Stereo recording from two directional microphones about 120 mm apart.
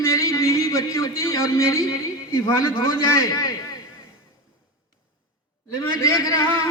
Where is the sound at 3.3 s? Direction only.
35° left (ahead or behind).